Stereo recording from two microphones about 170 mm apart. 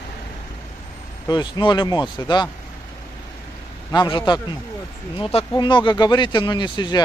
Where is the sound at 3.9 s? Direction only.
25° left (ahead or behind).